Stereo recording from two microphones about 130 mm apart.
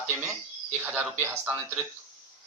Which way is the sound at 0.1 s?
10° right (ahead or behind).